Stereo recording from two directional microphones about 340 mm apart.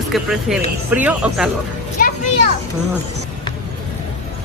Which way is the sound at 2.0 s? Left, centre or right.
Left.